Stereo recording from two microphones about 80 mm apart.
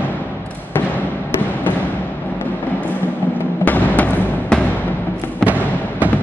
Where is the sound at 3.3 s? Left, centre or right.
Left.